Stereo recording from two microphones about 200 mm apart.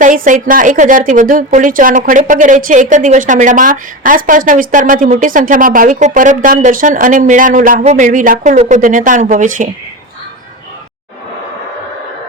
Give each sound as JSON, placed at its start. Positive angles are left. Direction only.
{"t": 0.0, "sound": "a woman's voice", "side_deg": -40}